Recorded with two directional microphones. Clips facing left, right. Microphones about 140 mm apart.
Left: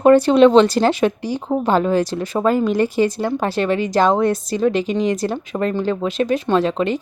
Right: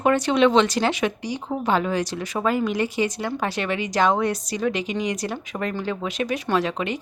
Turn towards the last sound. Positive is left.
turn(degrees=30)  # may be behind; listen again after turning